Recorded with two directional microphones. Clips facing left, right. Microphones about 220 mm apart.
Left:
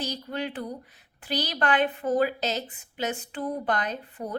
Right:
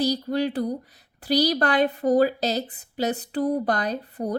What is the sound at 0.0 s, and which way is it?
A woman's voice, 35° right (ahead or behind).